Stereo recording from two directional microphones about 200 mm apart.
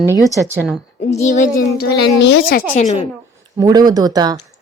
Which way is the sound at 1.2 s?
40° left (ahead or behind).